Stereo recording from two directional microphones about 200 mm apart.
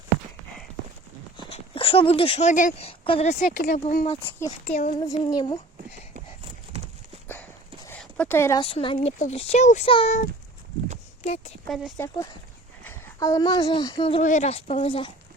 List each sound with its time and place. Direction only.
1.5 s speech: 25° left (ahead or behind)
3.0 s speech: 30° left (ahead or behind)
4.6 s child singing: 45° left (ahead or behind)
4.9 s speech: 20° left (ahead or behind)
6.7 s clip-clop: 30° right (ahead or behind)
7.9 s a sound: 5° left (ahead or behind)
8.6 s speech: 25° left (ahead or behind)
9.0 s speech: 35° left (ahead or behind)
11.2 s a sound: 30° left (ahead or behind)
11.7 s speech: centre (ahead or behind)
11.9 s speech: 15° left (ahead or behind)